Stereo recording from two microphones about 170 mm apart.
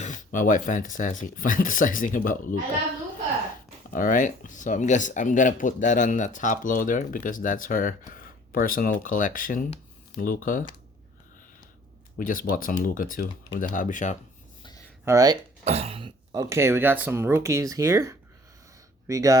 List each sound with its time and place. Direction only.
0.0 s speech: 50° left (ahead or behind)
3.9 s speech: 55° left (ahead or behind)
12.1 s speech: 55° left (ahead or behind)
15.0 s speech: 20° right (ahead or behind)
15.6 s speech: 35° right (ahead or behind); by 19.4 s 20° right (ahead or behind)